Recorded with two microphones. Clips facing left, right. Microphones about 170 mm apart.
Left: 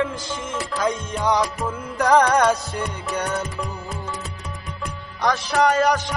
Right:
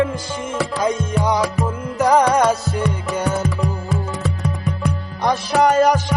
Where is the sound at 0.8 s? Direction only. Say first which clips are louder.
Right 2 dB; 10° right (ahead or behind).